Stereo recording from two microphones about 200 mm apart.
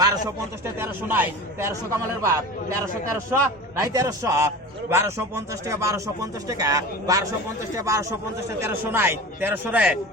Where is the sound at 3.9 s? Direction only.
15° right (ahead or behind).